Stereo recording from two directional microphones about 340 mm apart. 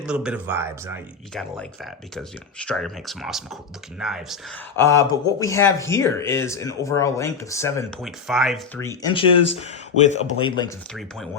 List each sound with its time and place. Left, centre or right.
0.0 s speech: centre